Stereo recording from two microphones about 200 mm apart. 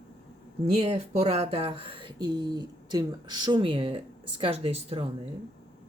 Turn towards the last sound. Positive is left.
turn(degrees=-30)  # may be behind; listen again after turning